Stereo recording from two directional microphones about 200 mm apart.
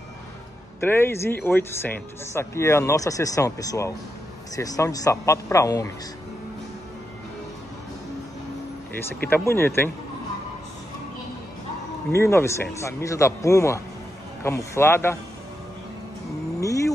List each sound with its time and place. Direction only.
0.7 s speech: 10° left (ahead or behind)
9.3 s speech: 10° left (ahead or behind)
12.1 s speech: 15° left (ahead or behind)
16.5 s vehicle: 15° left (ahead or behind)